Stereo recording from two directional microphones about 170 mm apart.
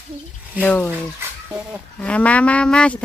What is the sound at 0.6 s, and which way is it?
Speech, 10° left (ahead or behind).